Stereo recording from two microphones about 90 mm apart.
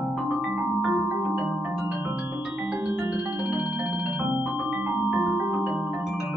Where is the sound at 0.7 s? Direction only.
Centre (ahead or behind).